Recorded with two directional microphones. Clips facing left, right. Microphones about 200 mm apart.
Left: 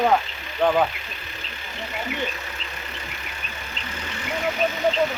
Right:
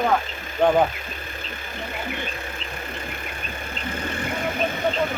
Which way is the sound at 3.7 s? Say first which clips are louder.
Right 7 dB; 55° right (ahead or behind).